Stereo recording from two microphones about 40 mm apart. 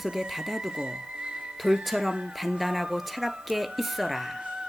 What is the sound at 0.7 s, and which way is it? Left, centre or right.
Speech, right.